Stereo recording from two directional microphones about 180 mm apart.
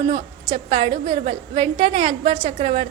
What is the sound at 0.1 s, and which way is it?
A woman's voice, 30° right (ahead or behind).